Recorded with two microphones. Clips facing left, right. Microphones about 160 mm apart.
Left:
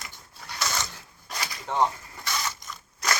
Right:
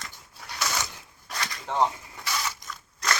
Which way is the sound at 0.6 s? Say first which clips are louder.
Even; 10° right (ahead or behind).